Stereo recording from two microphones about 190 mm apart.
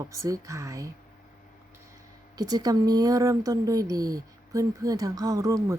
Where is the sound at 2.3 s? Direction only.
20° right (ahead or behind).